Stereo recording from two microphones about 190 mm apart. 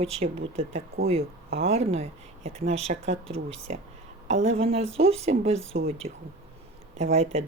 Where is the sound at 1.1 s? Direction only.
35° right (ahead or behind).